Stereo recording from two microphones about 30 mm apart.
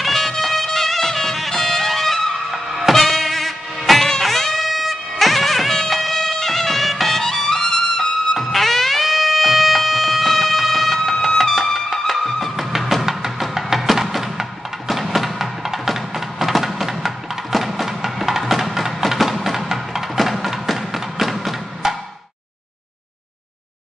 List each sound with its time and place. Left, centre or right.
0.0 s music: centre
7.2 s music: centre
8.4 s music: centre
12.7 s music: centre
21.8 s music: centre